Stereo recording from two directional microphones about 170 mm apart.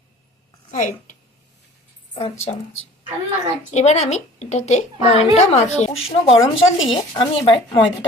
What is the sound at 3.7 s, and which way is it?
A woman's voice, 40° left (ahead or behind).